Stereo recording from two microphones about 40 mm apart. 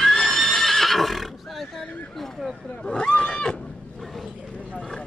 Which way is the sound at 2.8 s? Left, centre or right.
Left.